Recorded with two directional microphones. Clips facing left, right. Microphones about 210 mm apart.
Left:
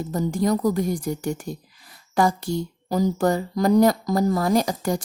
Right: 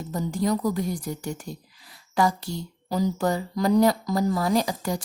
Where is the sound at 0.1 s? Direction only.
45° left (ahead or behind).